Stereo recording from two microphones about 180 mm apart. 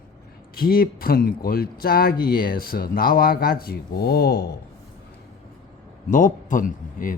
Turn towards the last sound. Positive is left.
turn(degrees=50)  # may be behind; listen again after turning